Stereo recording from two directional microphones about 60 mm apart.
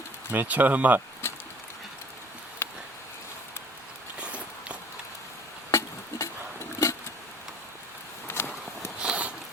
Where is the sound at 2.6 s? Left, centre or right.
Left.